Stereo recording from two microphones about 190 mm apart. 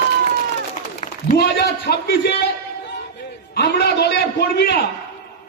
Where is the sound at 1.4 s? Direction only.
55° left (ahead or behind).